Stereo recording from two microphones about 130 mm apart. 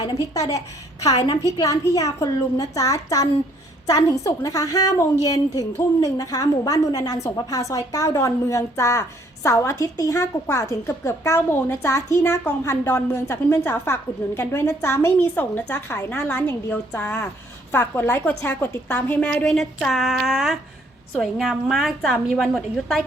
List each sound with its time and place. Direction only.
0.1 s a woman's voice: 25° left (ahead or behind); by 22.4 s centre (ahead or behind)